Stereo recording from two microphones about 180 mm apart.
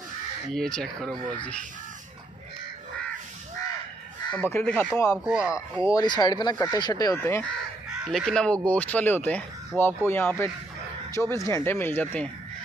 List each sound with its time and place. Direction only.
0.5 s speech: 5° left (ahead or behind)
4.3 s speech: 10° left (ahead or behind)
5.2 s speech: 5° right (ahead or behind)
5.5 s speech: 15° left (ahead or behind)
8.0 s speech: centre (ahead or behind)